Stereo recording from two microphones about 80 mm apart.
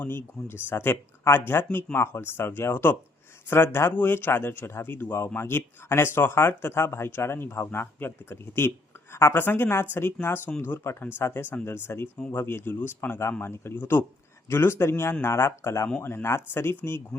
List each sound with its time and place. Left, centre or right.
0.0 s speech: left